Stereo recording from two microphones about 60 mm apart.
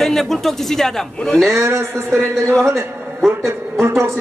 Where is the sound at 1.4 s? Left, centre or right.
Right.